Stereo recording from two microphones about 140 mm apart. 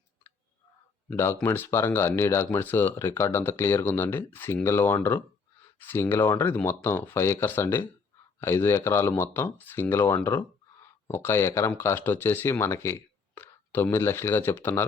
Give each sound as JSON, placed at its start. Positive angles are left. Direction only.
{"t": 1.2, "sound": "speech", "side_deg": 15}